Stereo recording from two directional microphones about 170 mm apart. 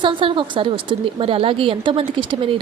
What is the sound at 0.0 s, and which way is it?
A woman's voice, 30° right (ahead or behind).